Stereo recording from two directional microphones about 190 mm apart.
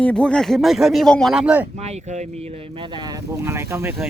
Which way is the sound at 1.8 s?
35° right (ahead or behind).